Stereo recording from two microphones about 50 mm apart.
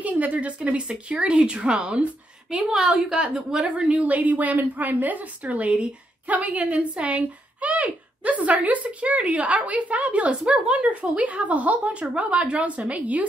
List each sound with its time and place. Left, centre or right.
0.0 s speech: right
2.5 s speech: centre; by 13.3 s right